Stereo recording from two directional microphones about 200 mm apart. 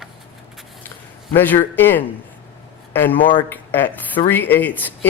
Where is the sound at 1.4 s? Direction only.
10° left (ahead or behind).